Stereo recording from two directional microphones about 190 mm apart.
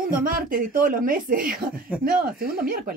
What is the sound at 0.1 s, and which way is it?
Speech, 45° right (ahead or behind).